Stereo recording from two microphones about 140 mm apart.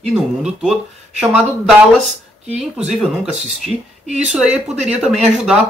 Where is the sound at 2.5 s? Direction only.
50° right (ahead or behind).